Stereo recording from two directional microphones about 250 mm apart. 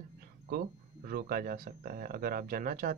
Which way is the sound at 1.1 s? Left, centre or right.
Right.